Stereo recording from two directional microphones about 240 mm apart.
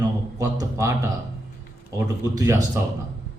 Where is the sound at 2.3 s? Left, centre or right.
Centre.